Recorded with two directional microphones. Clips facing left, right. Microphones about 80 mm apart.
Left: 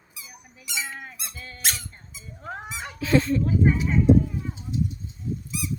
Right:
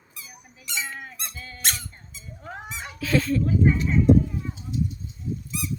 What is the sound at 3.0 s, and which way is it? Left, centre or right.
Speech, left.